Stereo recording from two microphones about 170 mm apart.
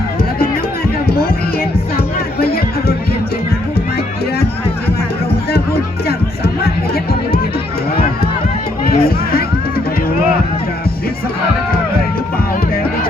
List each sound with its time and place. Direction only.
2.4 s music: 65° left (ahead or behind)
6.9 s music: 65° left (ahead or behind)
8.8 s music: 60° left (ahead or behind)
12.7 s music: 60° left (ahead or behind)